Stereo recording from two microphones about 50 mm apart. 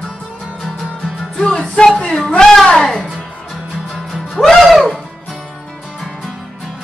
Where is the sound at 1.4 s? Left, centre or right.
Left.